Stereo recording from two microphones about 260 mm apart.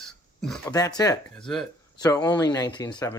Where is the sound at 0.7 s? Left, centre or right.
Centre.